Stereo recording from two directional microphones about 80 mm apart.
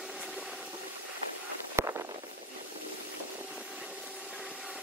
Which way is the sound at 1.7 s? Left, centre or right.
Right.